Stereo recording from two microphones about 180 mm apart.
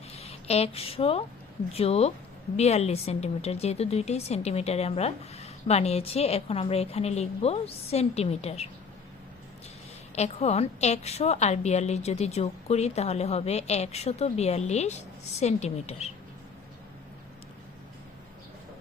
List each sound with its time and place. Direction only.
0.2 s a woman's voice: 35° left (ahead or behind)
10.2 s a woman's voice: 35° left (ahead or behind)